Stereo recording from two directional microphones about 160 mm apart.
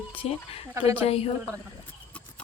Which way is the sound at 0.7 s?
15° right (ahead or behind).